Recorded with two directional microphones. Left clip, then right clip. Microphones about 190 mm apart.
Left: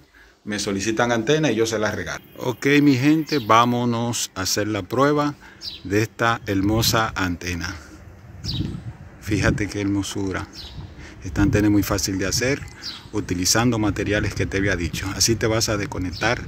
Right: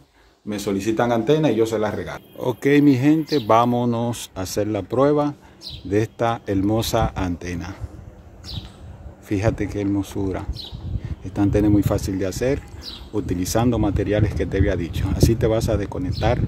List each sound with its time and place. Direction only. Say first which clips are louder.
0.5 s speech: right 1 dB; 10° right (ahead or behind)
9.3 s speech: even; 10° right (ahead or behind)